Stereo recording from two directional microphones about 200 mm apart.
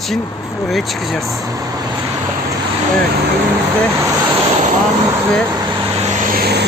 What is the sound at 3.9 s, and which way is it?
Vehicle, 15° right (ahead or behind).